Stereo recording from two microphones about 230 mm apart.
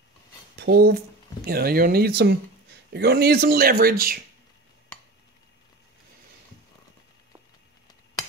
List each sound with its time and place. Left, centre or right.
0.6 s speech: right